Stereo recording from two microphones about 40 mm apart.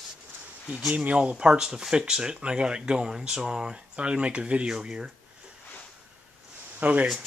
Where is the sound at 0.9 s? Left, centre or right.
Right.